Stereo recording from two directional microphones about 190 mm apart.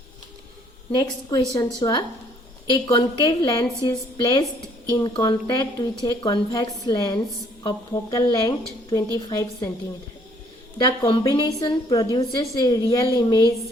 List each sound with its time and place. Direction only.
0.9 s a woman's voice: 20° left (ahead or behind)
10.8 s a woman's voice: 25° left (ahead or behind)